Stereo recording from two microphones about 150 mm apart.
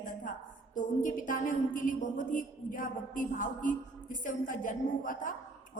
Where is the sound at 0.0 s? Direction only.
60° left (ahead or behind).